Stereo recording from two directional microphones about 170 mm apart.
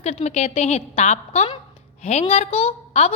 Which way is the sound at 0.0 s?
40° left (ahead or behind).